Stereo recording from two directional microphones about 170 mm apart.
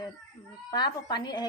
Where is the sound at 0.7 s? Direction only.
25° left (ahead or behind).